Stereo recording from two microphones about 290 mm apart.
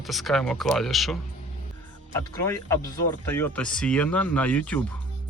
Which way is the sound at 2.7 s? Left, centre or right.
Centre.